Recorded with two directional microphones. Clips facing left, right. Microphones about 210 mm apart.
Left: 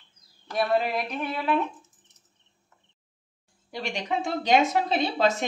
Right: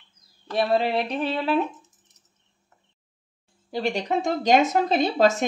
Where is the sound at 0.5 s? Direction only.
30° right (ahead or behind).